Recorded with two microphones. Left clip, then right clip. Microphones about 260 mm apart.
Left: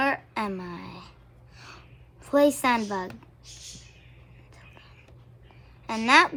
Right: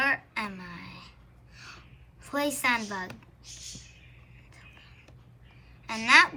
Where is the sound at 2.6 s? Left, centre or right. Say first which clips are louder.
Left 3 dB; centre.